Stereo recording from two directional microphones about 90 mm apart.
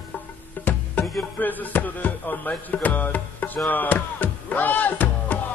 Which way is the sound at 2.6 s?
20° left (ahead or behind).